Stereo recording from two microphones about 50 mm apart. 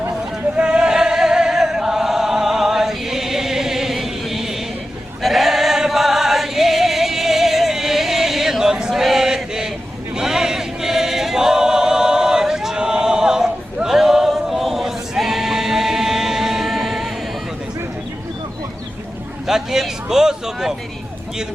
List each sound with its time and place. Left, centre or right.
0.5 s chant: centre
5.2 s music: centre
10.2 s choir: centre
19.5 s a sound: centre